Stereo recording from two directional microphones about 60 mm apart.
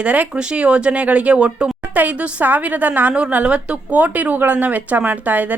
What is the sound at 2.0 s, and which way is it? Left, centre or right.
A woman's voice, right.